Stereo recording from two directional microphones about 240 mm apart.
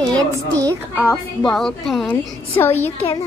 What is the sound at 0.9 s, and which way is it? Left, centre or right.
A woman's voice, centre.